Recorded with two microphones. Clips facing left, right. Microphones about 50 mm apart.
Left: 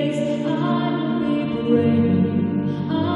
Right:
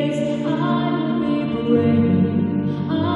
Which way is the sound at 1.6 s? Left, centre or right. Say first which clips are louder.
Right 1 dB; centre.